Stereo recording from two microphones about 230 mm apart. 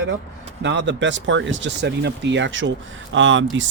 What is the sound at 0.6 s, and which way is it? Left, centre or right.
Speech, right.